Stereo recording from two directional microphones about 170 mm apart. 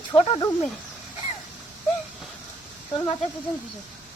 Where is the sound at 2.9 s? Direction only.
25° left (ahead or behind).